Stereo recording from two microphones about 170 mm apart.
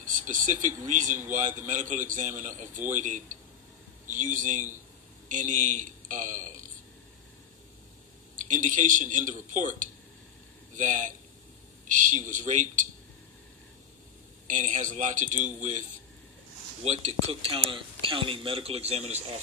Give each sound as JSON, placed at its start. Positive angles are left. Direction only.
{"t": 0.0, "sound": "a man's voice", "side_deg": -50}
{"t": 8.4, "sound": "a man's voice", "side_deg": -50}
{"t": 14.5, "sound": "a man's voice", "side_deg": -45}
{"t": 16.8, "sound": "speech", "side_deg": -40}